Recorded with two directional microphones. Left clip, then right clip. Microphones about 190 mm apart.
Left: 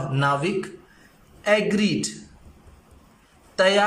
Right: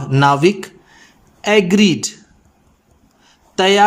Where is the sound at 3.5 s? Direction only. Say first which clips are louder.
Right 5 dB; 55° right (ahead or behind).